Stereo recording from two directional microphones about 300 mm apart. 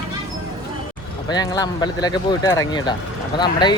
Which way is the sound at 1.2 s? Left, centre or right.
Centre.